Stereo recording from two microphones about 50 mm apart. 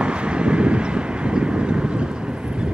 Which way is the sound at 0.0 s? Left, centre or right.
Right.